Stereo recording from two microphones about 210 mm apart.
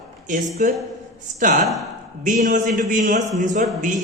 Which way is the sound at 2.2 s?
35° right (ahead or behind).